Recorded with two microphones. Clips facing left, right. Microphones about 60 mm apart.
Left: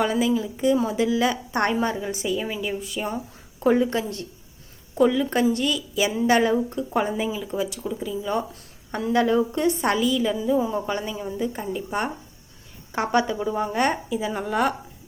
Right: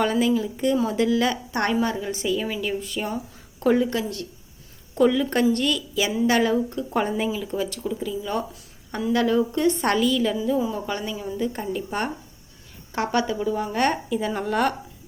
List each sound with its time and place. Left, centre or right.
0.0 s a woman's voice: centre
2.6 s a woman's voice: centre
3.8 s a woman's voice: left
4.9 s a woman's voice: centre
5.9 s a woman's voice: left
6.9 s a woman's voice: centre; by 9.7 s left
9.8 s a woman's voice: centre
10.6 s a woman's voice: left
12.9 s a woman's voice: left
14.1 s a woman's voice: centre